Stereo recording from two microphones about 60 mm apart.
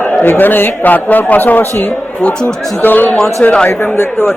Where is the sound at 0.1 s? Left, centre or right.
Left.